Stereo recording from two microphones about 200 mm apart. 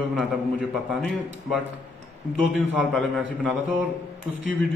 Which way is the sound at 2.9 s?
Centre (ahead or behind).